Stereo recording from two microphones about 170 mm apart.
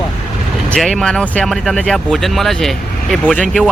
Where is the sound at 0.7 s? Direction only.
5° left (ahead or behind).